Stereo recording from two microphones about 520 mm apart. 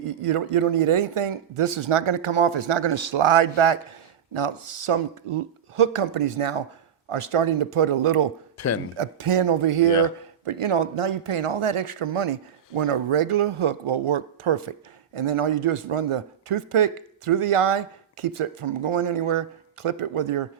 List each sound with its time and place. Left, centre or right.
0.2 s speech: right
8.5 s a man's voice: left
9.0 s speech: right